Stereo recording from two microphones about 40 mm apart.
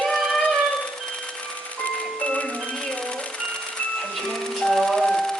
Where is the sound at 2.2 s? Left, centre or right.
Left.